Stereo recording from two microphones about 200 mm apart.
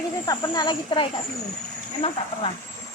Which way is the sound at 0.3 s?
20° left (ahead or behind).